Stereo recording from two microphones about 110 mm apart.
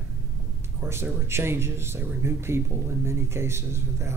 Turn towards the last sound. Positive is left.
turn(degrees=-25)  # may be behind; listen again after turning